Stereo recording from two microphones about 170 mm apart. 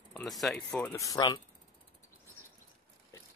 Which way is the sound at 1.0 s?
20° left (ahead or behind).